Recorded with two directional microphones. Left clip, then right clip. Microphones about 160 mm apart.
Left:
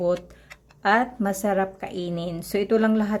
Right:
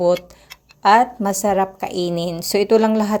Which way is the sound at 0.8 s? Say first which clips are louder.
Right 8 dB; 10° right (ahead or behind).